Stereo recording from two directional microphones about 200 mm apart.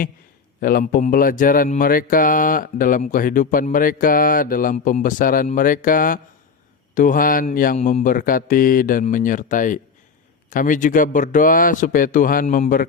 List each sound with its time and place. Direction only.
0.6 s speech: 45° left (ahead or behind)